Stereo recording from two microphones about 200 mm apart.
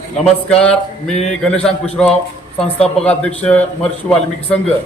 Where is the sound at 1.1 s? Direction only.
35° left (ahead or behind).